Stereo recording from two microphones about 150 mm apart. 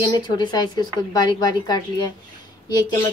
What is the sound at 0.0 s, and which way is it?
A woman's voice, 30° left (ahead or behind).